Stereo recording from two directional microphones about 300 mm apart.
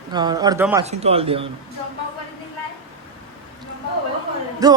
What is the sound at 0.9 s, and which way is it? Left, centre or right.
Speech, right.